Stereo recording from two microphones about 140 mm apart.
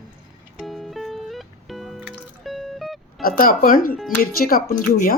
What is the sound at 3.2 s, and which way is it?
A woman's voice, 85° left.